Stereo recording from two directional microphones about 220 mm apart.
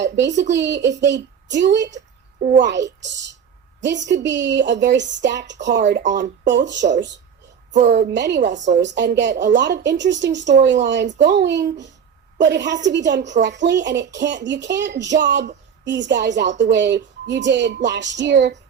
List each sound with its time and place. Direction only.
0.0 s a woman's voice: 50° right (ahead or behind)
7.7 s speech: 35° right (ahead or behind)
8.0 s a woman's voice: 50° right (ahead or behind)